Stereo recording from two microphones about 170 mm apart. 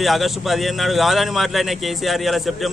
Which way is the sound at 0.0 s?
Centre (ahead or behind).